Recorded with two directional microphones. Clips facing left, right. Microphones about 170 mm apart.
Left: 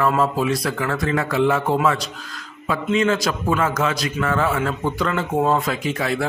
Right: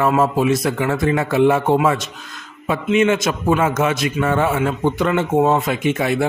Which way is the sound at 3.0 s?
25° right (ahead or behind).